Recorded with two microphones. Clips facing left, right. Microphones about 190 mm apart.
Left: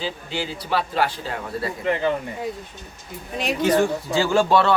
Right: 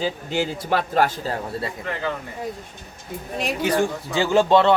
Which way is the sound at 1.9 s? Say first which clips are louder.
Left 12 dB; 20° left (ahead or behind).